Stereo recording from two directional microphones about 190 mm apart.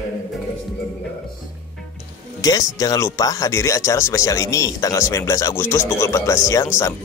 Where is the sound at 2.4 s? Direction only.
20° left (ahead or behind).